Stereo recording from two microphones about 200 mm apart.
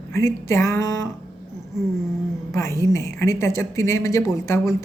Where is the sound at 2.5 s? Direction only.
15° left (ahead or behind).